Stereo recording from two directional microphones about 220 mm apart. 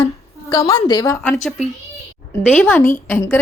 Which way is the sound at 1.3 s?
Centre (ahead or behind).